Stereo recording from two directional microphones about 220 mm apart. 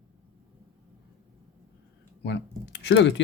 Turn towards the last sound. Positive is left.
turn(degrees=55)  # may be behind; listen again after turning